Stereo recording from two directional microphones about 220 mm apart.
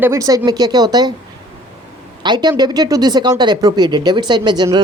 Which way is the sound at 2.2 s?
20° right (ahead or behind).